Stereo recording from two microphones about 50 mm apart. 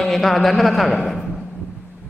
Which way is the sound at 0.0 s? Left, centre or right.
Centre.